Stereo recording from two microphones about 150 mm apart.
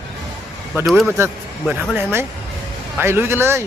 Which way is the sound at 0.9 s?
Centre (ahead or behind).